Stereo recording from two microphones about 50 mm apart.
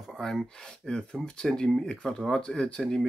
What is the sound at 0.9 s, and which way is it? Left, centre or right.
Speech, centre.